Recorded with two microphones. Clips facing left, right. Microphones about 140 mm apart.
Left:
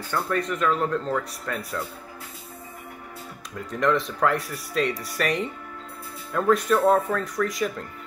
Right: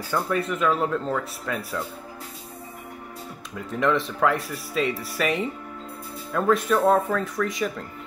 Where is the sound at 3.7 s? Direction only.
Centre (ahead or behind).